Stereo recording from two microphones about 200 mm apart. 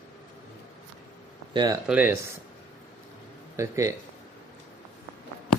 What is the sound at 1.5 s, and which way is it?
Speech, 20° right (ahead or behind).